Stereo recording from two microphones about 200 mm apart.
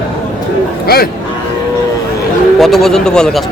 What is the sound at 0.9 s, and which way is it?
Speech, 50° left (ahead or behind).